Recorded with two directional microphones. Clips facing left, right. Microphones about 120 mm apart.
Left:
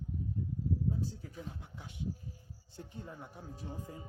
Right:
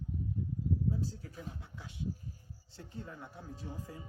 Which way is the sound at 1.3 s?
40° right (ahead or behind).